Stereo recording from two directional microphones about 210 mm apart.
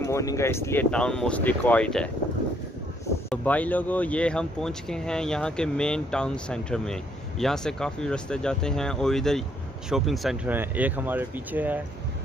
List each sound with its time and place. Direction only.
0.0 s speech: 15° left (ahead or behind)
3.3 s speech: 5° left (ahead or behind); by 11.8 s 10° right (ahead or behind)